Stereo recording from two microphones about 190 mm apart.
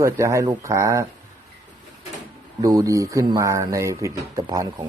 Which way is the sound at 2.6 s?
20° right (ahead or behind).